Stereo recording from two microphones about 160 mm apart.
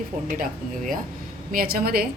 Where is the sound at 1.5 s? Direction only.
65° right (ahead or behind).